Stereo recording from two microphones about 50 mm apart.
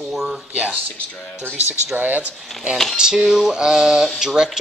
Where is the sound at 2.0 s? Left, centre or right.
Right.